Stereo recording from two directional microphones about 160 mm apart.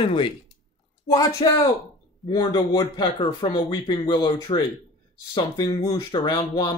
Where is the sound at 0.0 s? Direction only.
35° left (ahead or behind).